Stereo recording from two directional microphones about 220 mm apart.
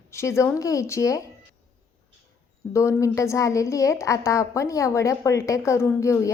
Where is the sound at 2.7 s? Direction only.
15° left (ahead or behind).